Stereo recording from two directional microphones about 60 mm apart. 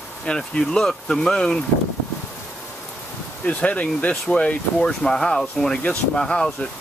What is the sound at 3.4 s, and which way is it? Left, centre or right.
Speech, left.